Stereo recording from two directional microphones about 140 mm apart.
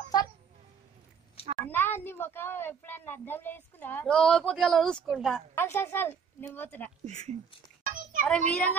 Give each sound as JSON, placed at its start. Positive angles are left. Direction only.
{"t": 1.4, "sound": "a sound", "side_deg": 45}
{"t": 1.7, "sound": "a woman's voice", "side_deg": 15}
{"t": 5.5, "sound": "a woman's voice", "side_deg": 15}
{"t": 7.1, "sound": "speech", "side_deg": -50}
{"t": 7.8, "sound": "a sound", "side_deg": -75}
{"t": 8.3, "sound": "a woman's voice", "side_deg": 10}